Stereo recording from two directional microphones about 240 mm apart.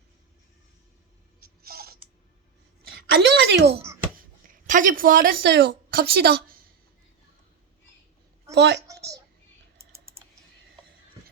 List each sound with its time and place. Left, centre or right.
1.4 s a sound: right
3.2 s a woman's voice: right
4.2 s speech: right
8.5 s a woman's voice: right